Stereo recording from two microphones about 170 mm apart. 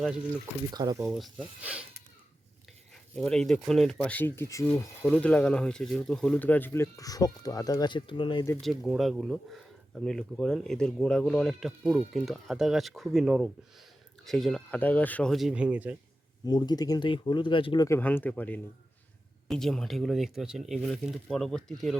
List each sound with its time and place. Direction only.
0.7 s speech: 25° right (ahead or behind)
1.0 s speech: centre (ahead or behind)
3.2 s speech: centre (ahead or behind)
5.0 s speech: 5° left (ahead or behind); by 8.4 s 30° left (ahead or behind)
8.8 s speech: centre (ahead or behind)
16.5 s speech: 25° left (ahead or behind)
17.8 s speech: 15° left (ahead or behind)